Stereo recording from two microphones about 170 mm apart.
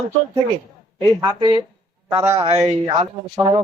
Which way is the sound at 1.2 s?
25° right (ahead or behind).